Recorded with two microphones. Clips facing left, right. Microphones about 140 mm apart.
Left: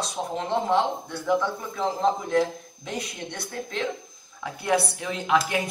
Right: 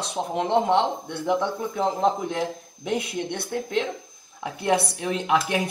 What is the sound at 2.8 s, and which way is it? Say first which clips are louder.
A man's voice: right 7 dB; 60° right (ahead or behind).